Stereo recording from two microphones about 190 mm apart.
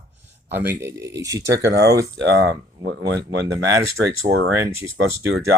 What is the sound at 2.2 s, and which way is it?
Speech, 65° right (ahead or behind).